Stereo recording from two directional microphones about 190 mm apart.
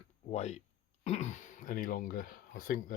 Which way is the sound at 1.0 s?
35° left (ahead or behind).